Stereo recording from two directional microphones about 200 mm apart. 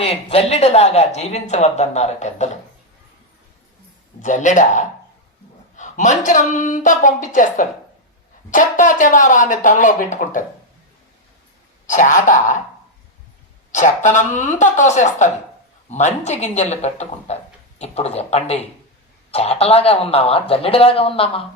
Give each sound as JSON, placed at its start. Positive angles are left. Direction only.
{"t": 0.0, "sound": "speech", "side_deg": 30}
{"t": 4.2, "sound": "speech", "side_deg": 35}
{"t": 11.9, "sound": "speech", "side_deg": 40}
{"t": 13.7, "sound": "speech", "side_deg": 40}